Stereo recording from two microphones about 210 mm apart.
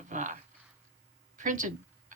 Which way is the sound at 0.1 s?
35° right (ahead or behind).